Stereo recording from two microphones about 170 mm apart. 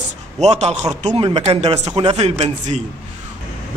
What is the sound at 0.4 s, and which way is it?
A man's voice, 40° right (ahead or behind).